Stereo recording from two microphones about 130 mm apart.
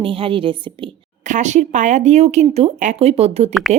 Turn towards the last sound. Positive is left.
turn(degrees=0)  # may be behind; listen again after turning